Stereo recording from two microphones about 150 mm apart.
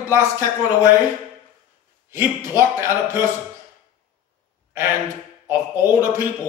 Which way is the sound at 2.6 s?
15° right (ahead or behind).